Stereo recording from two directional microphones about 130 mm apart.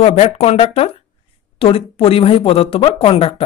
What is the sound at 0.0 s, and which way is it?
Speech, 55° left (ahead or behind).